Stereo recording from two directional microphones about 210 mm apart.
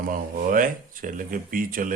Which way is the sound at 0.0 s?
40° right (ahead or behind).